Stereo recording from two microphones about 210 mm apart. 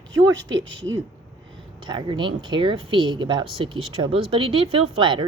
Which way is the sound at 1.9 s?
20° right (ahead or behind).